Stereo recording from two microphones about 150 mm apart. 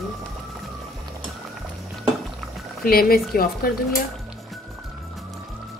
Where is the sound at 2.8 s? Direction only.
80° left.